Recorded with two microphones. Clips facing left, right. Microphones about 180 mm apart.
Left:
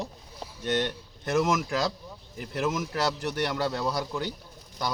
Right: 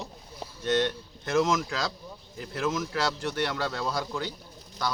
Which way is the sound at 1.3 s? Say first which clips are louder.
Even; 15° left (ahead or behind).